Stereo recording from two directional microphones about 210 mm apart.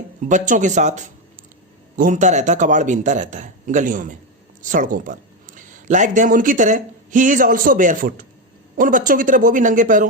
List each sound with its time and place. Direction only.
0.3 s a man's voice: 35° right (ahead or behind)